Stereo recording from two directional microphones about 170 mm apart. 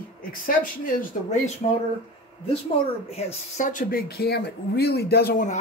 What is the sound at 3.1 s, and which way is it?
Speech, 40° left (ahead or behind).